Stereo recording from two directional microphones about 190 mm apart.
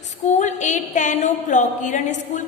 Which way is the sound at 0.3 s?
40° left (ahead or behind).